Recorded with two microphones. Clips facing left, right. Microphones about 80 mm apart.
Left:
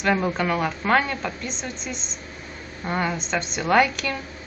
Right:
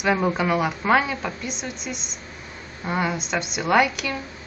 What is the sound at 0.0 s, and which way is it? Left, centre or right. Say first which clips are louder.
A woman's voice: right 1 dB; centre.